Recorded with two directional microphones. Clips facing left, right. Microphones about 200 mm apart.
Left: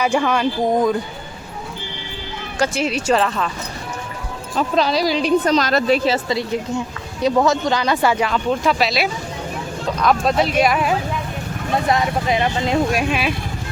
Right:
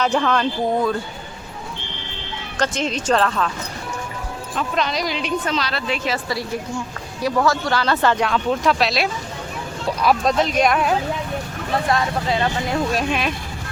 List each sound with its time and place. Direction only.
0.0 s speech: 10° left (ahead or behind)
2.6 s speech: 10° left (ahead or behind)
4.5 s speech: 35° left (ahead or behind)
6.1 s speech: 20° left (ahead or behind); by 10.3 s 5° right (ahead or behind)
10.3 s speech: 5° left (ahead or behind)
11.9 s speech: 20° left (ahead or behind)